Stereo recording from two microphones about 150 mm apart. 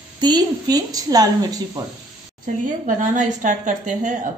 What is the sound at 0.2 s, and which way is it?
A woman's voice, 25° right (ahead or behind).